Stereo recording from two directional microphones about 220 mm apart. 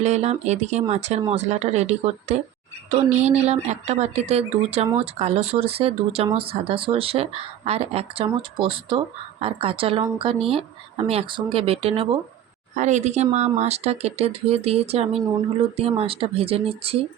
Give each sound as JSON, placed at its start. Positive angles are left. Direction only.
{"t": 0.0, "sound": "speech", "side_deg": -30}